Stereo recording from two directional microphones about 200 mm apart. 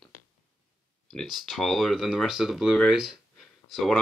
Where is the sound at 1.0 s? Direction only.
Centre (ahead or behind).